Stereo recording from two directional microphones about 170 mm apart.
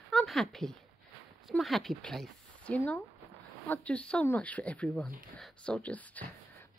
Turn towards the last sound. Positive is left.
turn(degrees=10)  # may be behind; listen again after turning